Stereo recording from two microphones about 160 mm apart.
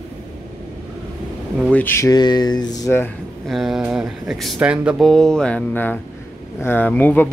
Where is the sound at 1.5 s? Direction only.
10° left (ahead or behind); by 2.9 s 25° left (ahead or behind).